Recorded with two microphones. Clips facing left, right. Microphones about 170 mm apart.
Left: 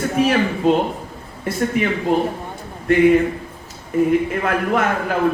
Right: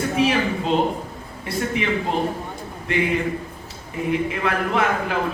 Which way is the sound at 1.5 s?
45° left (ahead or behind).